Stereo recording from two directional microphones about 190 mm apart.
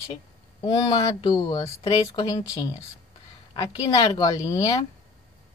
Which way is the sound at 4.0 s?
20° left (ahead or behind).